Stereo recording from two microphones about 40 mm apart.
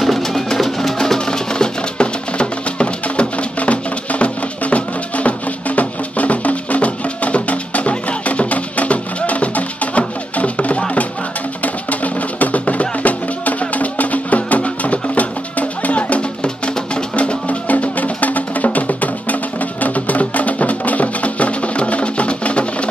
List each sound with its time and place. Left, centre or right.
0.0 s music: centre; by 16.3 s left
16.4 s music: left
17.1 s music: left